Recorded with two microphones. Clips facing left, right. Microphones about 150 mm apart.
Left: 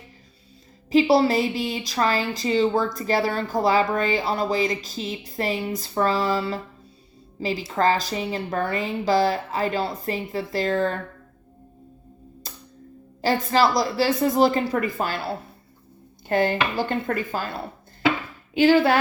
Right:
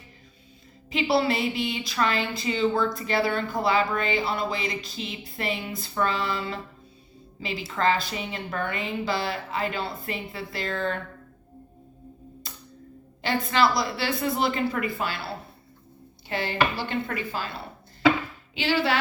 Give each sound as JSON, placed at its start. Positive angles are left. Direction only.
{"t": 0.9, "sound": "a woman's voice", "side_deg": 40}
{"t": 12.4, "sound": "music", "side_deg": 40}
{"t": 13.2, "sound": "a woman's voice", "side_deg": 40}
{"t": 16.3, "sound": "speech", "side_deg": 45}
{"t": 18.5, "sound": "speech", "side_deg": 50}